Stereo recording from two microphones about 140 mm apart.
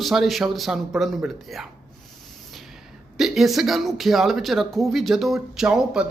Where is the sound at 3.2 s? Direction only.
Centre (ahead or behind).